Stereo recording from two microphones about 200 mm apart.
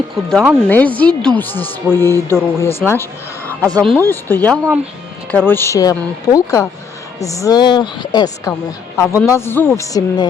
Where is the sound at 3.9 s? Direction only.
10° left (ahead or behind).